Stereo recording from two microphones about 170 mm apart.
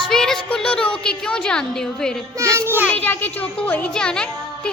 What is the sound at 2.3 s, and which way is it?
Speech, 15° right (ahead or behind).